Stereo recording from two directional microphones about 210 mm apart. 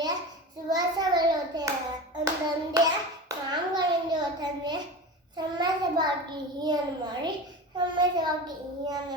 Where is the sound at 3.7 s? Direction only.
20° right (ahead or behind).